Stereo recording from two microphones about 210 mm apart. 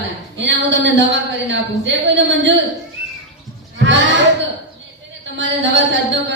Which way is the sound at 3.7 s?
60° right (ahead or behind).